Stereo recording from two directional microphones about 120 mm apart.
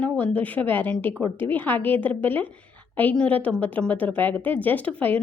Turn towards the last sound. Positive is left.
turn(degrees=15)  # may be behind; listen again after turning